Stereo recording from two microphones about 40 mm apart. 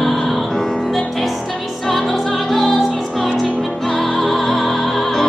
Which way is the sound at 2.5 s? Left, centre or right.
Centre.